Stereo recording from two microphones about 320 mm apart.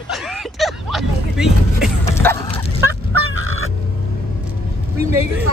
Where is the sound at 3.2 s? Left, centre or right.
Right.